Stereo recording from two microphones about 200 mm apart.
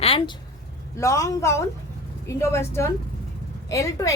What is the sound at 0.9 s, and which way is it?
A woman's voice, 15° left (ahead or behind).